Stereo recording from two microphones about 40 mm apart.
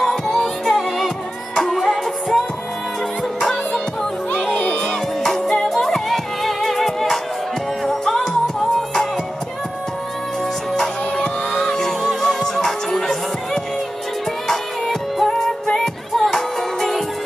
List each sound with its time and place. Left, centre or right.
0.0 s music: centre
4.5 s music: left
5.2 s music: centre
8.2 s music: centre
11.1 s music: centre